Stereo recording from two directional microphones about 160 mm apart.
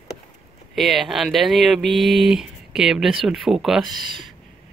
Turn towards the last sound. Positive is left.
turn(degrees=-30)  # may be behind; listen again after turning